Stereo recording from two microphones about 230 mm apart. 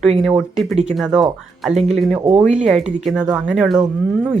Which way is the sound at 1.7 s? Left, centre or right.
Right.